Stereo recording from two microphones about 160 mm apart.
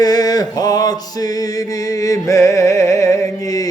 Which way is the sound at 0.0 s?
25° left (ahead or behind).